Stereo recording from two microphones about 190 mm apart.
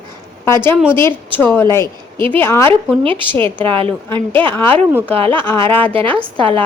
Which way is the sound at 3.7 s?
30° right (ahead or behind).